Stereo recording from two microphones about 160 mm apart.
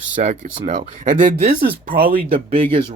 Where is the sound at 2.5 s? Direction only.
35° right (ahead or behind).